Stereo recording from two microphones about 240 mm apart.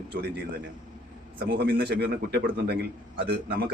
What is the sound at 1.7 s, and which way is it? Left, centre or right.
A man's voice, right.